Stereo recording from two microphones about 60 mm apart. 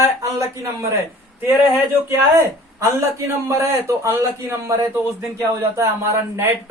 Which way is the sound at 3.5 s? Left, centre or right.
Right.